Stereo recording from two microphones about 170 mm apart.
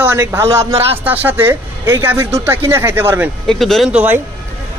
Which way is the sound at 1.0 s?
10° right (ahead or behind).